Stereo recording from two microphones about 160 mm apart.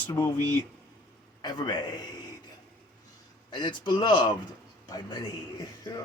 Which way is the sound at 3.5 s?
30° left (ahead or behind).